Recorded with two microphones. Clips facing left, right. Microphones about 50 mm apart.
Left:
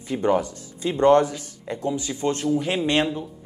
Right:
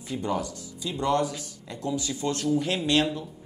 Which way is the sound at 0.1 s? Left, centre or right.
Left.